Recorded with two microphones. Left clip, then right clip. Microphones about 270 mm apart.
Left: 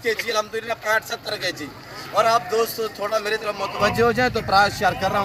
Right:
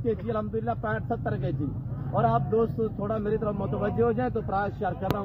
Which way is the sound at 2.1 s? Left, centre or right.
Left.